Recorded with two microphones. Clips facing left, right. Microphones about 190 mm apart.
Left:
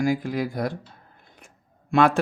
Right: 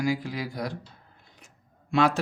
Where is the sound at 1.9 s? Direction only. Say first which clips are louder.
Left 4 dB; 55° left (ahead or behind).